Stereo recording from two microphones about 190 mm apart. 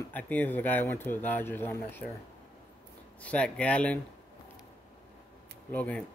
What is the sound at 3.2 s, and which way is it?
Speech, 5° left (ahead or behind).